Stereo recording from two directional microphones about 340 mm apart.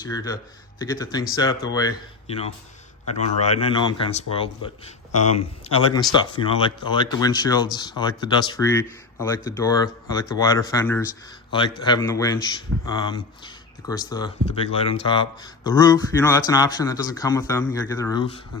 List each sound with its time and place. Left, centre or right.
0.0 s speech: centre